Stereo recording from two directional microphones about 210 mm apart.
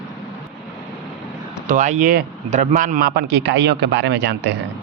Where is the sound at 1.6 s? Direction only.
35° right (ahead or behind); by 4.5 s 55° right (ahead or behind).